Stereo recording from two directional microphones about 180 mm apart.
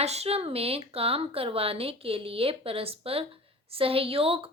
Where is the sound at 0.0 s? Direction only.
35° right (ahead or behind).